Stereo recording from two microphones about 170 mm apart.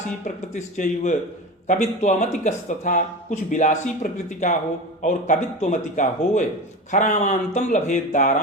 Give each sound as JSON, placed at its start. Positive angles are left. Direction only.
{"t": 0.5, "sound": "speech", "side_deg": 45}